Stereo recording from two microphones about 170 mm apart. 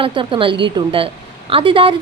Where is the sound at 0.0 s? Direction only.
30° right (ahead or behind).